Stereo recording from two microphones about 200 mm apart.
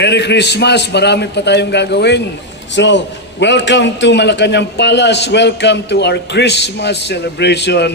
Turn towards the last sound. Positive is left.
turn(degrees=55)  # may be behind; listen again after turning